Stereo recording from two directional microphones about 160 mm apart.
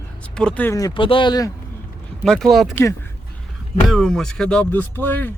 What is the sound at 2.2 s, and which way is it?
Speech, 5° left (ahead or behind).